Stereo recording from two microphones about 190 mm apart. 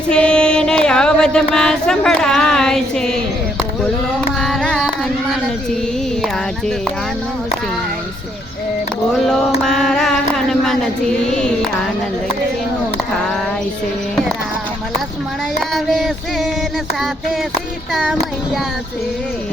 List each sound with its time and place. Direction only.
0.1 s a sound: 5° left (ahead or behind)
4.4 s carnatic music: centre (ahead or behind)
6.2 s child singing: centre (ahead or behind)
9.6 s a sound: centre (ahead or behind)
11.3 s child singing: 5° left (ahead or behind)
15.7 s child singing: centre (ahead or behind)
17.9 s child singing: centre (ahead or behind)